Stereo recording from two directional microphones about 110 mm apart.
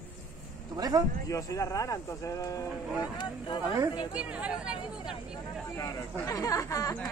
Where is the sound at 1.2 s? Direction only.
30° left (ahead or behind).